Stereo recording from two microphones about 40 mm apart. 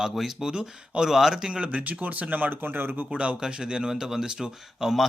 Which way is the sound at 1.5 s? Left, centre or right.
Right.